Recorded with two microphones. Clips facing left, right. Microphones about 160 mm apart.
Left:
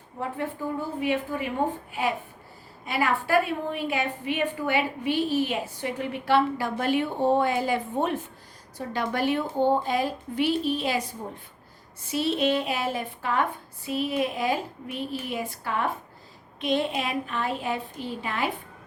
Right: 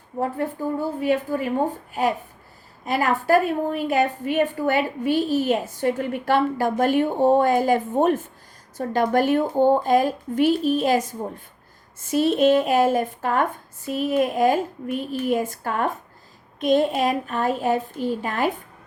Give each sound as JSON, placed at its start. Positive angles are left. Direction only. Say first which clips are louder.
{"t": 0.2, "sound": "a woman's voice", "louder": "right 6 dB", "side_deg": -40}